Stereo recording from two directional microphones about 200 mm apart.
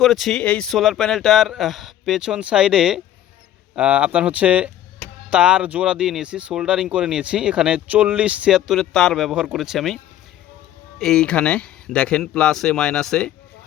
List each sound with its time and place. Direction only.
0.0 s speech: centre (ahead or behind)